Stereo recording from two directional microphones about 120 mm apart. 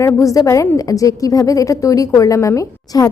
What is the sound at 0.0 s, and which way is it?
A woman's voice, 25° left (ahead or behind).